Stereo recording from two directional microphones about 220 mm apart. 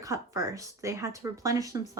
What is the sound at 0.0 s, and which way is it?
Speech, 15° right (ahead or behind).